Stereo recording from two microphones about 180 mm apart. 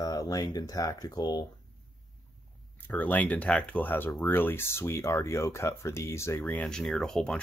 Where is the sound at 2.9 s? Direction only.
10° left (ahead or behind).